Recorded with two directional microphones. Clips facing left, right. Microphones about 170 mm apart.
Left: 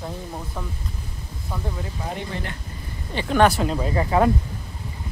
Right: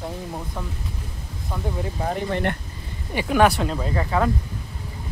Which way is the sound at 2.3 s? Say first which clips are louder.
Right 8 dB; 60° right (ahead or behind).